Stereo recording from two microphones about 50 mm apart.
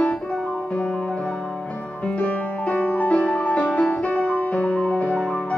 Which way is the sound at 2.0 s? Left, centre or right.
Left.